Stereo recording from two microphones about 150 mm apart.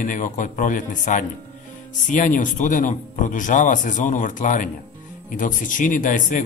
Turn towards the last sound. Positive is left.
turn(degrees=60)  # may be behind; listen again after turning